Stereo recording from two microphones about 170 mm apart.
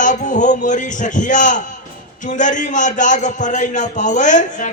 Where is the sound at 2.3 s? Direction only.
45° left (ahead or behind).